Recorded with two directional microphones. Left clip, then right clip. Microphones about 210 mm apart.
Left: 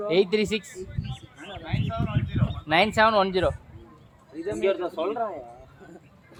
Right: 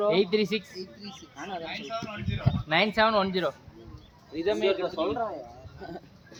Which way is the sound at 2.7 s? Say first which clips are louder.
Left 3 dB; 45° left (ahead or behind).